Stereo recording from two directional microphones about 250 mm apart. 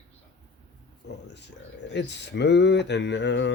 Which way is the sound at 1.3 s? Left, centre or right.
Left.